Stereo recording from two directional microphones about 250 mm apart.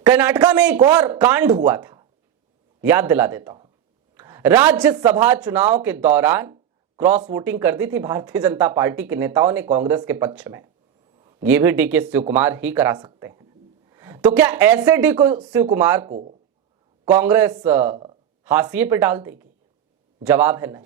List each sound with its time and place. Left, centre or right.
0.0 s a man's voice: centre
11.2 s a sound: centre
11.4 s speech: centre